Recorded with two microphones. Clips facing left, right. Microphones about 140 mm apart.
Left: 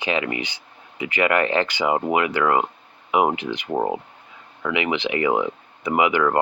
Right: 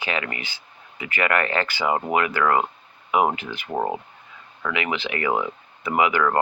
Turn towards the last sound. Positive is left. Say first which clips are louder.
# left 1 dB
turn(degrees=15)  # may be behind; listen again after turning